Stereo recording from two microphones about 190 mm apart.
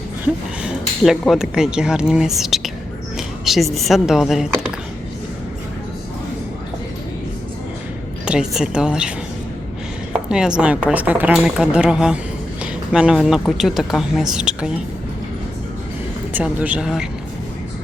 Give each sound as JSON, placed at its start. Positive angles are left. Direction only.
{"t": 0.6, "sound": "speech", "side_deg": 0}
{"t": 8.2, "sound": "speech", "side_deg": -5}
{"t": 16.3, "sound": "speech", "side_deg": -5}